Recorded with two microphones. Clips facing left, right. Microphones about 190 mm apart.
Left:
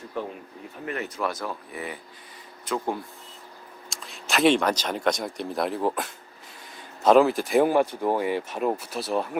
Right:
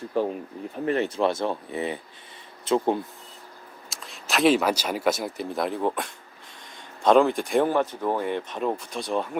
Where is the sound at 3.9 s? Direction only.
Centre (ahead or behind).